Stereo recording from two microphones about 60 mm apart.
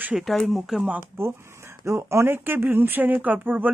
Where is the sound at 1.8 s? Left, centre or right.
Right.